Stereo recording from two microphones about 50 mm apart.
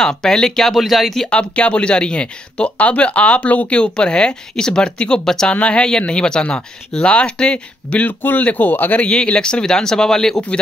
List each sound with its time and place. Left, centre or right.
0.0 s speech: centre
1.2 s speech: centre
5.5 s speech: left
8.2 s speech: left
9.0 s speech: left